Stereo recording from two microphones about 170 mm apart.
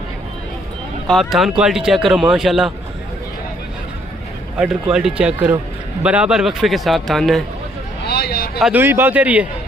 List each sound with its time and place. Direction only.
1.0 s speech: centre (ahead or behind)
4.6 s speech: 5° right (ahead or behind)
8.0 s a sound: 70° left (ahead or behind)
8.5 s speech: 5° right (ahead or behind)